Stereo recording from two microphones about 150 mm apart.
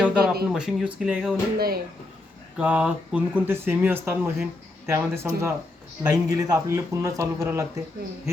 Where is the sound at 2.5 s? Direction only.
5° right (ahead or behind).